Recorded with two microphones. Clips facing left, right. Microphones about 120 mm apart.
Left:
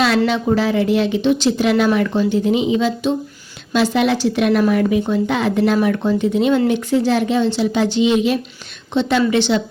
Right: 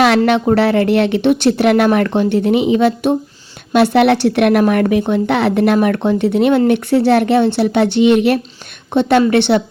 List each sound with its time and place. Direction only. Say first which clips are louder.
0.3 s speech: right 5 dB; 65° right (ahead or behind)